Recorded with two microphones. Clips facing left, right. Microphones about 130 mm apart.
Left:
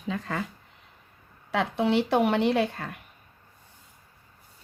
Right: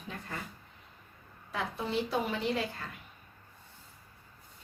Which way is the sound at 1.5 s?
75° left (ahead or behind).